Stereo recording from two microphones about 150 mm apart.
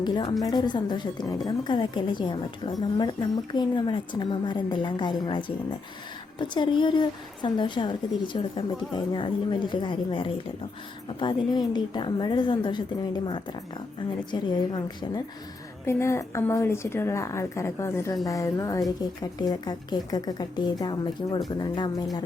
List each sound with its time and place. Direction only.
0.4 s a woman's voice: 30° left (ahead or behind)
15.9 s speech: 20° left (ahead or behind)